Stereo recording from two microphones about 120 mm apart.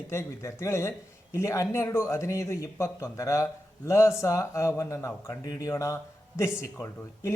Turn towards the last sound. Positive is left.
turn(degrees=20)  # may be behind; listen again after turning